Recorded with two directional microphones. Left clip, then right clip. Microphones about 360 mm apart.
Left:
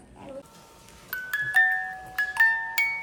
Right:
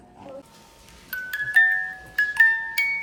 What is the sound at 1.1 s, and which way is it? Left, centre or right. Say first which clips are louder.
Music: right 3 dB; centre.